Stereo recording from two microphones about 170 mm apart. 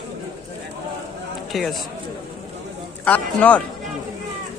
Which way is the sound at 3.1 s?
10° left (ahead or behind).